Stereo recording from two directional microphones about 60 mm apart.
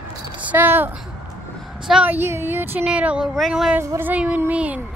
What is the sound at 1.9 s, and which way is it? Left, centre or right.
Speech, centre.